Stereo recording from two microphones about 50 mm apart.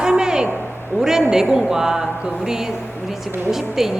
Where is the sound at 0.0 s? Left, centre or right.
Centre.